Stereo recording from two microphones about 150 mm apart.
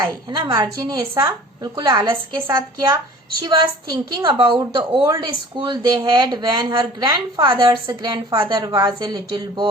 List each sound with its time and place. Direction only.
0.0 s speech: 25° right (ahead or behind)
3.4 s a woman's voice: 30° right (ahead or behind)